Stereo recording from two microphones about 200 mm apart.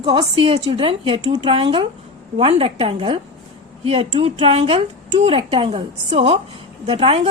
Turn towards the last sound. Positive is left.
turn(degrees=-30)  # may be behind; listen again after turning